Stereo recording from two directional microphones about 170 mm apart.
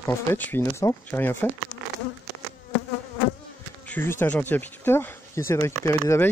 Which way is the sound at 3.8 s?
10° left (ahead or behind).